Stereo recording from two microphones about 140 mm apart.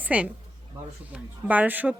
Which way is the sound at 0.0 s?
10° right (ahead or behind).